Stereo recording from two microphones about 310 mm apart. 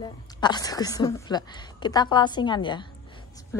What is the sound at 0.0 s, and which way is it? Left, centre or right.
A woman's voice, centre.